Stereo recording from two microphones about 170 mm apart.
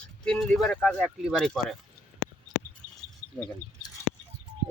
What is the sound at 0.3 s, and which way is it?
Speech, 5° left (ahead or behind).